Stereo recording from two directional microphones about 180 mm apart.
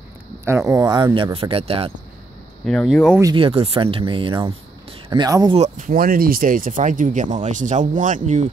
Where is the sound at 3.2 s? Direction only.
30° right (ahead or behind).